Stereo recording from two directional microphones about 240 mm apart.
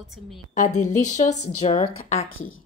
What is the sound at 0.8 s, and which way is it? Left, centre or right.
A woman's voice, left.